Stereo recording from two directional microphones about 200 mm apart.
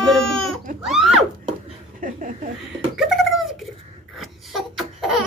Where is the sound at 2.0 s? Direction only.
45° right (ahead or behind).